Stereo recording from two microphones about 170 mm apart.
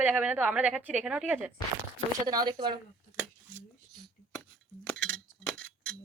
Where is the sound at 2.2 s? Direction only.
25° right (ahead or behind).